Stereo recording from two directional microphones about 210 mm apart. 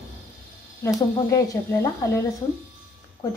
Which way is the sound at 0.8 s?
15° left (ahead or behind).